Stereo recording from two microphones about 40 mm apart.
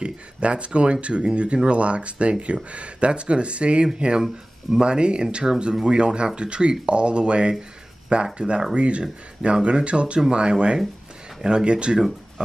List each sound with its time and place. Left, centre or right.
0.0 s speech: right